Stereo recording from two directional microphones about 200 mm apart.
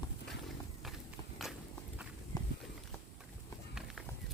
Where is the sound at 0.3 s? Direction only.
Centre (ahead or behind).